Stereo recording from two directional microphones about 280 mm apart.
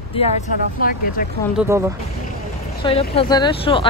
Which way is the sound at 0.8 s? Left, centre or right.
Left.